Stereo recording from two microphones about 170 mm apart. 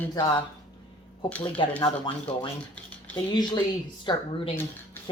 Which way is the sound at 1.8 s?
25° left (ahead or behind).